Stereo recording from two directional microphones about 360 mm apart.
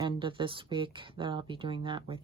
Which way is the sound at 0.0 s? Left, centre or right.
Centre.